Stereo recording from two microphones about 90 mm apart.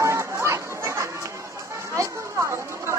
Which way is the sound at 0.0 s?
35° right (ahead or behind).